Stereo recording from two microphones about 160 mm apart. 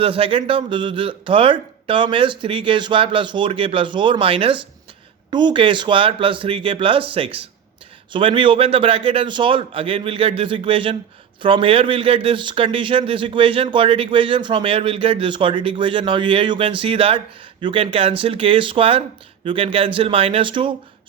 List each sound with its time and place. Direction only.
0.0 s speech: 35° right (ahead or behind)